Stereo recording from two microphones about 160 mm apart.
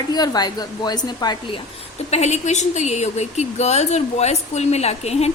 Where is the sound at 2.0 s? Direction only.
45° left (ahead or behind).